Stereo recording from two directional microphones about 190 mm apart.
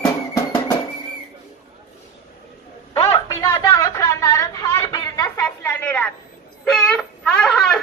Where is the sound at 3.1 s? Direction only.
15° left (ahead or behind).